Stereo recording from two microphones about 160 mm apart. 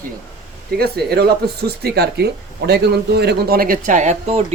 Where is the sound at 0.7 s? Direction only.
80° right.